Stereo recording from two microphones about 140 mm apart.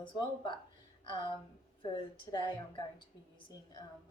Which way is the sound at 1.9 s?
30° left (ahead or behind).